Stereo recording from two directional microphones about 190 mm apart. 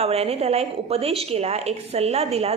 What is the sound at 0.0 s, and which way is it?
A woman's voice, 30° right (ahead or behind).